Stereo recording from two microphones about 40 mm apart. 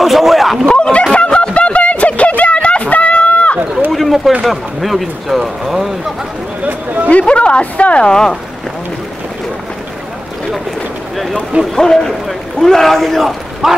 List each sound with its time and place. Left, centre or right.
0.0 s speech: centre
0.7 s speech: left
1.1 s a sound: left
3.9 s a sound: centre
4.5 s speech: centre
7.1 s a woman's voice: left
8.1 s speech: centre
11.7 s speech: centre
12.1 s speech: centre
13.6 s speech: centre